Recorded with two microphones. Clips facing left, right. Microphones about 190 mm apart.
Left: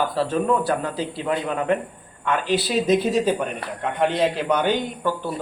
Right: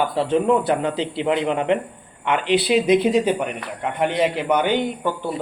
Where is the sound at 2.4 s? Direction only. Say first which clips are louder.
Right 6 dB; 65° right (ahead or behind).